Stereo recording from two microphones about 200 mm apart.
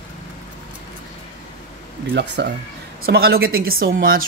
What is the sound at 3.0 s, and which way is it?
A woman's voice, 50° right (ahead or behind).